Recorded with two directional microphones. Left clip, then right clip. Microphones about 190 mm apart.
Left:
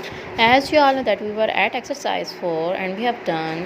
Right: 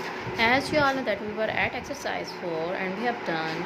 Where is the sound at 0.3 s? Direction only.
25° left (ahead or behind).